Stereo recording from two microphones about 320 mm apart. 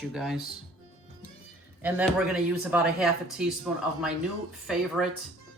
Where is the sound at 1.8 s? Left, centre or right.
Centre.